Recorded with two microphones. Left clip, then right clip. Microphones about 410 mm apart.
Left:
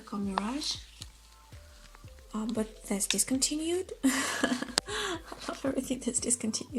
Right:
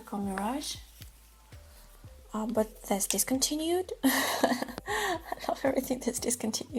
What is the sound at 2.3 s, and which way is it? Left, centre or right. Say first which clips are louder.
Speech: right 5 dB; centre.